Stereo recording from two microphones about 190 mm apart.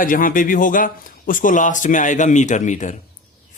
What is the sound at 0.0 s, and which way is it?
Speech, 45° left (ahead or behind).